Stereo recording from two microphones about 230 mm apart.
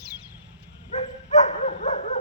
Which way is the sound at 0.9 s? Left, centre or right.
Left.